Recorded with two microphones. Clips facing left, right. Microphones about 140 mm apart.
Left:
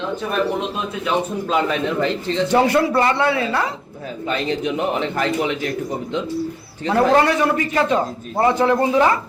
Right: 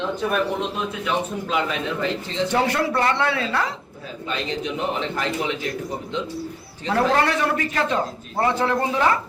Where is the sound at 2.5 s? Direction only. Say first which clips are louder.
Left 6 dB; 10° left (ahead or behind).